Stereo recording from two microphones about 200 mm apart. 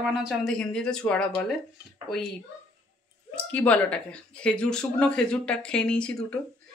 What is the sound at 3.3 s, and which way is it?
Speech, 5° left (ahead or behind).